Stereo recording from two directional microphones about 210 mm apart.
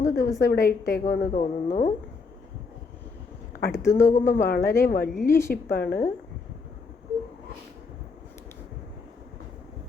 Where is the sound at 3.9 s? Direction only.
35° left (ahead or behind).